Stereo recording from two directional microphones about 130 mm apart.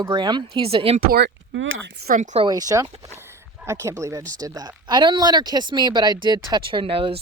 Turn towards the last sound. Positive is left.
turn(degrees=-45)  # may be behind; listen again after turning